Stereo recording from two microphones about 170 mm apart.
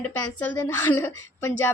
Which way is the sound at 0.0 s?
10° left (ahead or behind).